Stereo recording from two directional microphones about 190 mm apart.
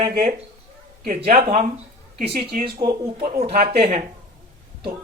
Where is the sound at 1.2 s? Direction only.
50° right (ahead or behind).